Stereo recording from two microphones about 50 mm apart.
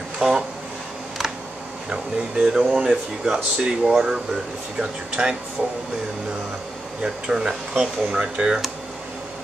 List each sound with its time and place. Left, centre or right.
0.2 s speech: centre
1.9 s speech: centre
7.0 s speech: centre